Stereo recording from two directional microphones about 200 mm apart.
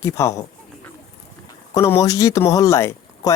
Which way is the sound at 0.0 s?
15° left (ahead or behind).